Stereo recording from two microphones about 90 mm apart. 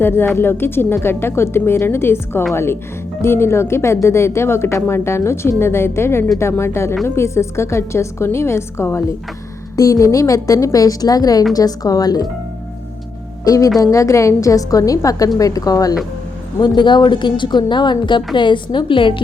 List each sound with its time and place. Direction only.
0.3 s a woman's voice: 25° left (ahead or behind); by 12.3 s 45° left (ahead or behind)
13.4 s a woman's voice: 40° left (ahead or behind)
16.6 s speech: 60° left (ahead or behind)